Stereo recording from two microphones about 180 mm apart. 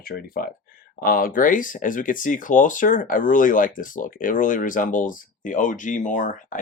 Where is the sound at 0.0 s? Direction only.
55° left (ahead or behind).